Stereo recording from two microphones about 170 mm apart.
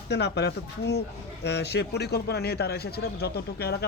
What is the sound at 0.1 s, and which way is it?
A man's voice, 80° left.